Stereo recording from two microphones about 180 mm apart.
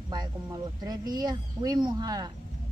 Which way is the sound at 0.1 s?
20° right (ahead or behind).